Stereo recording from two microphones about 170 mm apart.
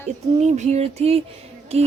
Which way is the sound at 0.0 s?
40° right (ahead or behind).